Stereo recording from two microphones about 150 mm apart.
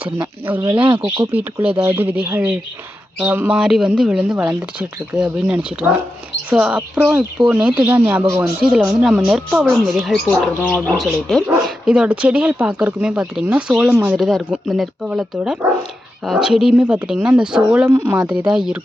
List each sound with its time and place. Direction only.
0.4 s speech: 10° right (ahead or behind)
0.7 s speech: 35° right (ahead or behind)
1.0 s speech: 20° right (ahead or behind)
1.3 s speech: 10° right (ahead or behind)
10.2 s speech: 10° left (ahead or behind)
11.4 s speech: 10° right (ahead or behind)
14.2 s speech: centre (ahead or behind)
18.4 s speech: 5° right (ahead or behind)